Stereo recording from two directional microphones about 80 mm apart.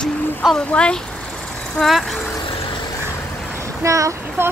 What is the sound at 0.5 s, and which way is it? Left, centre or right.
Speech, centre.